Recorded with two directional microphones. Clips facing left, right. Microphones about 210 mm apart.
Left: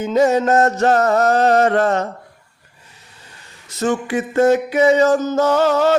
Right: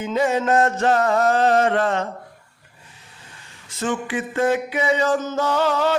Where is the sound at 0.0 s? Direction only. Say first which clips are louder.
Left 6 dB; 40° left (ahead or behind).